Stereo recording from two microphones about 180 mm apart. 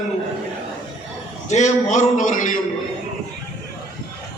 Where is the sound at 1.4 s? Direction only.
40° left (ahead or behind).